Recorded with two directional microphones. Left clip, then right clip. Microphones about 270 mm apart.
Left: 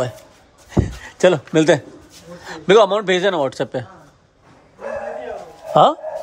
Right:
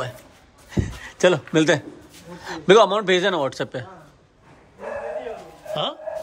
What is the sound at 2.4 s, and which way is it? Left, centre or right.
Speech, centre.